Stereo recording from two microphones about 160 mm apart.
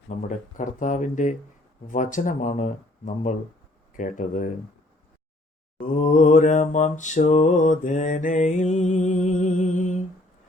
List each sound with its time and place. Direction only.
0.2 s mantra: 50° left (ahead or behind)
5.8 s mantra: 50° left (ahead or behind)